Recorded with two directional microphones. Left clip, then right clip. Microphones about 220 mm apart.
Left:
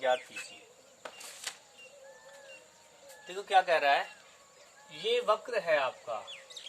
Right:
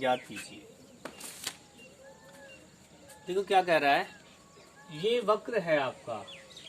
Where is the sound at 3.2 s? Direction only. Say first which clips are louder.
Right 9 dB; 10° right (ahead or behind).